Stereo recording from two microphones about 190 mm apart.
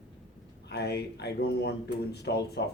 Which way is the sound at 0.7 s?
60° left (ahead or behind).